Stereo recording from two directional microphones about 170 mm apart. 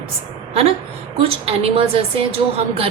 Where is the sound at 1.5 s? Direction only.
35° right (ahead or behind).